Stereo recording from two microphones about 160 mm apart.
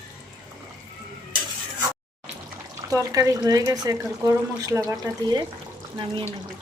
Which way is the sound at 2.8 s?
20° right (ahead or behind).